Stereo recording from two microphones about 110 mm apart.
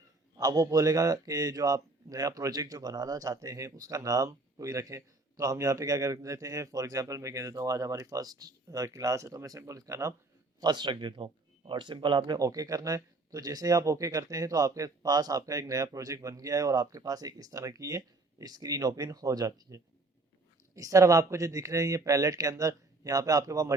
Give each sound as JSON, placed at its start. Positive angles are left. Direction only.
{"t": 0.3, "sound": "a man's voice", "side_deg": -35}
{"t": 10.6, "sound": "a man's voice", "side_deg": -40}